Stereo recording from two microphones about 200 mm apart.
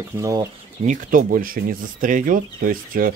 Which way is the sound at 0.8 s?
40° right (ahead or behind).